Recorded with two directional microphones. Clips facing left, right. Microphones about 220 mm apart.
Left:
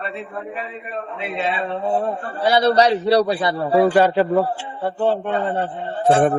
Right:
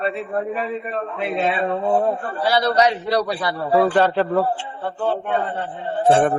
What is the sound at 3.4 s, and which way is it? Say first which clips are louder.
Speech: left 2 dB; 15° left (ahead or behind).